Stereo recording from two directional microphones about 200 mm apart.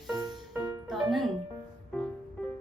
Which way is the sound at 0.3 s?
15° right (ahead or behind).